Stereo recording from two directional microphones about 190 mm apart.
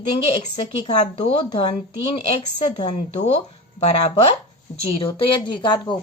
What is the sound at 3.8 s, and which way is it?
Speech, 30° left (ahead or behind).